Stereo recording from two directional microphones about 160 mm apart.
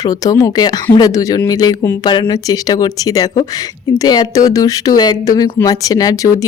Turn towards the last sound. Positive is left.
turn(degrees=20)  # may be behind; listen again after turning